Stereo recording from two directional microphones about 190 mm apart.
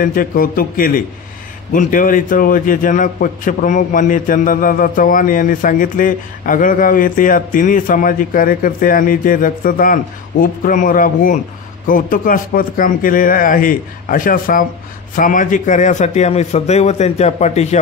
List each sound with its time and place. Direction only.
0.0 s a man's voice: 45° left (ahead or behind)